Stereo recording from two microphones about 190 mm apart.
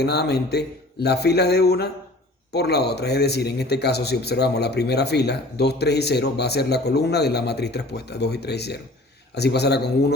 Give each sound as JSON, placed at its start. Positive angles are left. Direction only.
{"t": 0.0, "sound": "a man's voice", "side_deg": 60}